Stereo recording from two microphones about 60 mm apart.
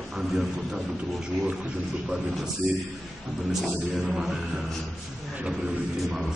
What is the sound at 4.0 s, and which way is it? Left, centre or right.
Speech, centre.